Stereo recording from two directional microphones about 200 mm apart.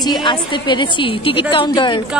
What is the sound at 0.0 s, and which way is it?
A woman's voice, 20° left (ahead or behind).